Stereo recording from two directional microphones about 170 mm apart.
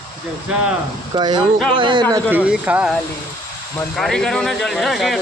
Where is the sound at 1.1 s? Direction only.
25° right (ahead or behind).